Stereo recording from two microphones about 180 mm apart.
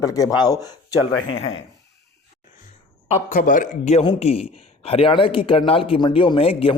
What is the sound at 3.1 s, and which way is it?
A man's voice, 45° left (ahead or behind).